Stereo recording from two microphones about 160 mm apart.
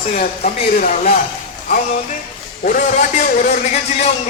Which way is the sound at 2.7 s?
55° left (ahead or behind).